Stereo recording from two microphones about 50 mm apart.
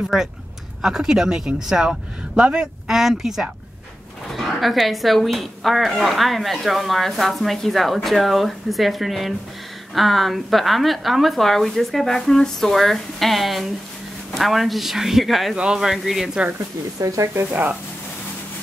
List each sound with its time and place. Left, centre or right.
0.1 s speech: centre
2.9 s speech: centre
4.3 s a woman's voice: centre
15.5 s speech: centre
17.0 s speech: right
17.4 s speech: right